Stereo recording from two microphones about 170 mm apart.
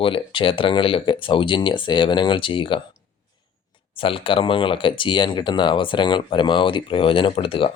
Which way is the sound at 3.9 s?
30° left (ahead or behind).